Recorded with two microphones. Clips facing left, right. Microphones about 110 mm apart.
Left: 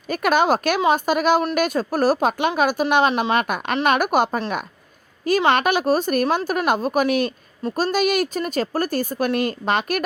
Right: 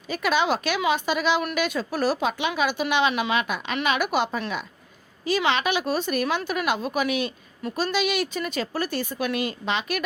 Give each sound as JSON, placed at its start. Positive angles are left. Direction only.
{"t": 0.1, "sound": "a woman's voice", "side_deg": 50}
{"t": 7.6, "sound": "a woman's voice", "side_deg": 35}